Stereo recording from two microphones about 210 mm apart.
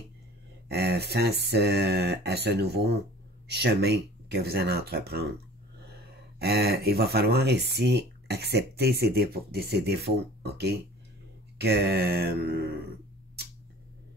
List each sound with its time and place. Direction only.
0.7 s speech: 50° right (ahead or behind)
6.4 s speech: 50° right (ahead or behind)